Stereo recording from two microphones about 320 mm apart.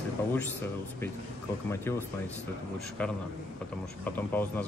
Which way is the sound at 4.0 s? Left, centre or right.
Centre.